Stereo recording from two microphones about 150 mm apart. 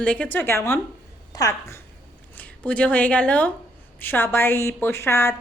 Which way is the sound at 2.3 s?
10° left (ahead or behind).